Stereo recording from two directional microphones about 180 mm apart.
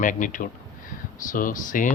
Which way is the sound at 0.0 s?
45° left (ahead or behind).